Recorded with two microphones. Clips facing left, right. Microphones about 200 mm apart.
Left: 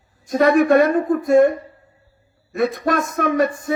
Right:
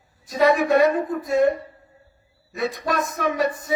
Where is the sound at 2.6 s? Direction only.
50° left (ahead or behind).